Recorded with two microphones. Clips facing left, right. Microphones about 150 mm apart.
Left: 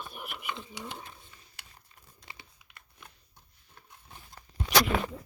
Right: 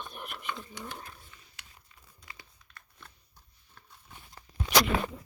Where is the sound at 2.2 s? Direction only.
25° left (ahead or behind).